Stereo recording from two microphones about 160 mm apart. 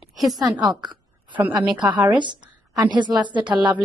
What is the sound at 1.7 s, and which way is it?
Speech, 10° right (ahead or behind).